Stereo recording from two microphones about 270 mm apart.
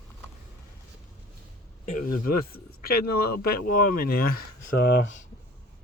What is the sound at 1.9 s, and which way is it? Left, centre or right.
Speech, left.